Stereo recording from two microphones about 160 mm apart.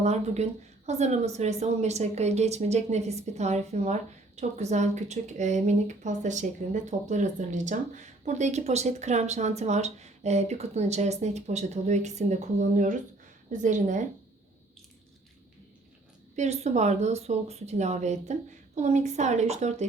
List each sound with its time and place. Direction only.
0.0 s a woman's voice: 45° right (ahead or behind)
16.3 s a woman's voice: 45° right (ahead or behind)